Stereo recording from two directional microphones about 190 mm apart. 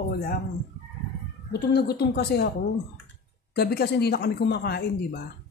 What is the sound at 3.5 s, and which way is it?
Speech, 55° left (ahead or behind).